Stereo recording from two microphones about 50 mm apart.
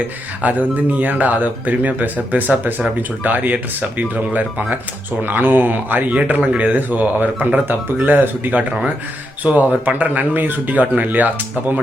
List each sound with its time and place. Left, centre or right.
0.4 s a man's voice: right